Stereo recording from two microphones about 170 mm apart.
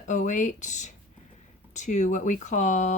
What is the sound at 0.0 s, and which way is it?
Speech, 45° left (ahead or behind).